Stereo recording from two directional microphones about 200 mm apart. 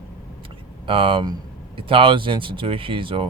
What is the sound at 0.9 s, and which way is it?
Speech, 25° right (ahead or behind).